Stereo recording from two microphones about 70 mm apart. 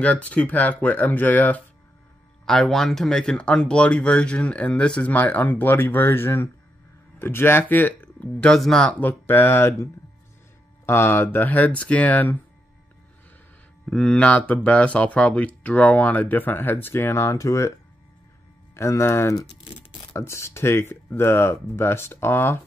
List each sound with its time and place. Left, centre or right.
0.0 s speech: centre
2.4 s speech: centre; by 8.5 s left
8.5 s speech: centre
9.0 s speech: left
10.9 s speech: left
13.8 s speech: centre; by 17.7 s left
18.8 s speech: left